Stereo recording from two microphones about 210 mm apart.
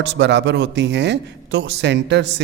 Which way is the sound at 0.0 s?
55° right (ahead or behind).